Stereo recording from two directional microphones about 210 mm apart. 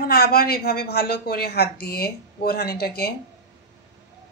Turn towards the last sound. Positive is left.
turn(degrees=50)  # may be behind; listen again after turning